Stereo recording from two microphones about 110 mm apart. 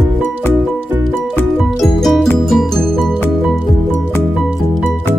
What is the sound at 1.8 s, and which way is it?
Music, centre (ahead or behind).